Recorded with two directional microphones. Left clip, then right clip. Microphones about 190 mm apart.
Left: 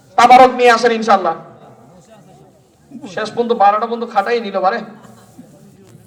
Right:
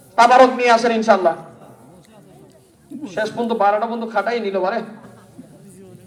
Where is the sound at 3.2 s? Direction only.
20° right (ahead or behind).